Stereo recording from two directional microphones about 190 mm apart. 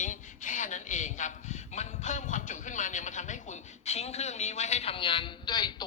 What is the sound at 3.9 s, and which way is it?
A man's voice, 35° left (ahead or behind).